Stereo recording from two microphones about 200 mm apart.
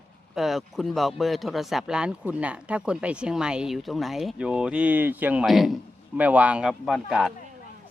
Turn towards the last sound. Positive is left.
turn(degrees=0)  # may be behind; listen again after turning